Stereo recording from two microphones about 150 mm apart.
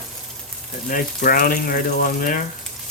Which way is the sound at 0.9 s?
65° left (ahead or behind).